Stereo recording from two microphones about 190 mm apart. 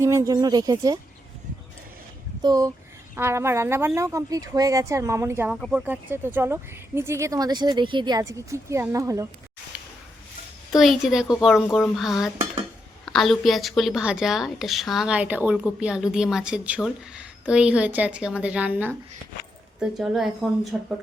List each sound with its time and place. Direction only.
0.0 s speech: 15° right (ahead or behind)
2.4 s speech: 20° right (ahead or behind)
10.7 s a woman's voice: centre (ahead or behind)